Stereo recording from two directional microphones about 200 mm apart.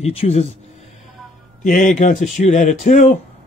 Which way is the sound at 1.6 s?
45° left (ahead or behind).